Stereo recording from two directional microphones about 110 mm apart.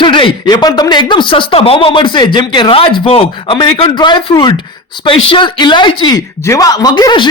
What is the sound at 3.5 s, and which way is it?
Speech, 45° left (ahead or behind).